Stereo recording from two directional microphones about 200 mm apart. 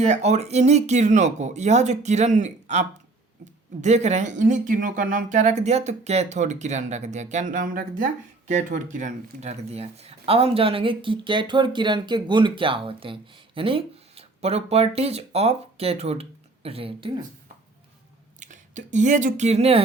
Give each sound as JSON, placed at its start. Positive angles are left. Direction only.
{"t": 0.0, "sound": "speech", "side_deg": -35}
{"t": 18.3, "sound": "speech", "side_deg": -40}